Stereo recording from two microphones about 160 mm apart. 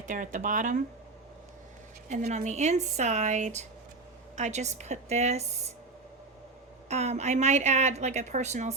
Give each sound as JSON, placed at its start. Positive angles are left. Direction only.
{"t": 0.0, "sound": "a woman's voice", "side_deg": -55}
{"t": 2.3, "sound": "a woman's voice", "side_deg": -45}
{"t": 6.8, "sound": "a woman's voice", "side_deg": -45}